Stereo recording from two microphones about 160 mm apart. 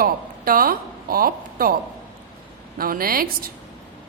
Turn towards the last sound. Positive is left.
turn(degrees=-65)  # may be behind; listen again after turning